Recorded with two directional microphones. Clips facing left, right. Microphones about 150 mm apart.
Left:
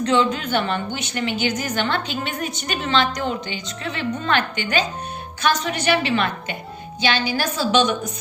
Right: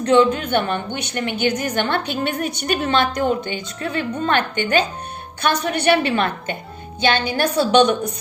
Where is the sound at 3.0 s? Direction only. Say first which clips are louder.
Right 4 dB; 50° right (ahead or behind).